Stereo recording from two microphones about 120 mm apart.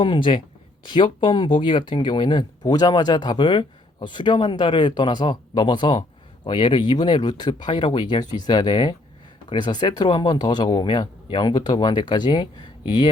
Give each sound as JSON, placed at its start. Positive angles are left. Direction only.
{"t": 0.0, "sound": "speech", "side_deg": 45}